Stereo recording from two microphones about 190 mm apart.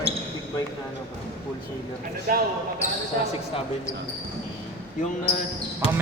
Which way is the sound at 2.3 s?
45° right (ahead or behind).